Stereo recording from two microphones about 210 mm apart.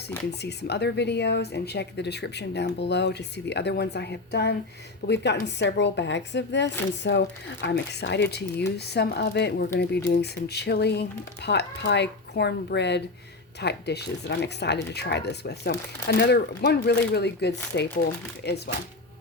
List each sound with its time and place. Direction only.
0.3 s speech: 50° left (ahead or behind)